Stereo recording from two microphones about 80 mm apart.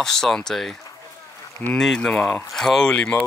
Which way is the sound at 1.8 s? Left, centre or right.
Centre.